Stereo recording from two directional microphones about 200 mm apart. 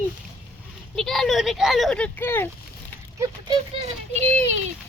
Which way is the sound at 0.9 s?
Centre (ahead or behind).